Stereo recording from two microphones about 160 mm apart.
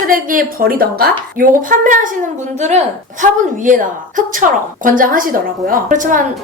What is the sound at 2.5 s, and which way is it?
A woman's voice, 45° right (ahead or behind).